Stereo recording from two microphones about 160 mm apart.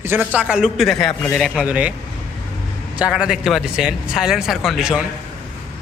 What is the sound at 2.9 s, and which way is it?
Speech, 5° right (ahead or behind).